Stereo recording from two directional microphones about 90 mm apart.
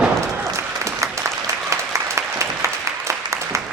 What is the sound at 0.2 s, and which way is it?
Applause, 35° right (ahead or behind).